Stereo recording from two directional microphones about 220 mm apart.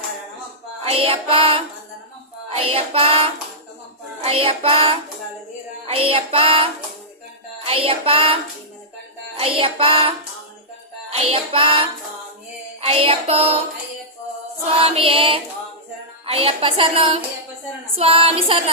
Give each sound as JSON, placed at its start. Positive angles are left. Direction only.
{"t": 1.0, "sound": "a woman's voice", "side_deg": -25}
{"t": 2.7, "sound": "a woman's voice", "side_deg": -25}
{"t": 9.4, "sound": "a woman's voice", "side_deg": -25}
{"t": 11.1, "sound": "a woman's voice", "side_deg": -25}
{"t": 14.8, "sound": "a woman's voice", "side_deg": -25}